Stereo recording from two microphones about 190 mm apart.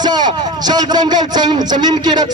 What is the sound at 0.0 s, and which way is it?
A man's voice, 20° right (ahead or behind).